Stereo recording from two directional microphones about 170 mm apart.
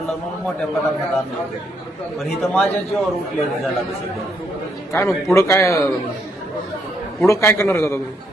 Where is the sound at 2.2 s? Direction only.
Centre (ahead or behind).